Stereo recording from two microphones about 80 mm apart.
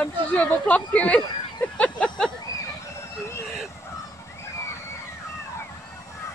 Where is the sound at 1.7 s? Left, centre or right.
Centre.